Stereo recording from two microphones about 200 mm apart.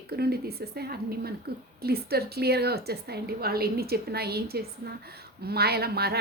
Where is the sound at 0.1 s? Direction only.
50° right (ahead or behind).